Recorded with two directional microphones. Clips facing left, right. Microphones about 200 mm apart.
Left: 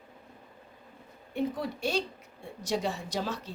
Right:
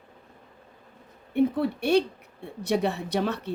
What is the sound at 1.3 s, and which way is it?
A woman's voice, 60° right (ahead or behind).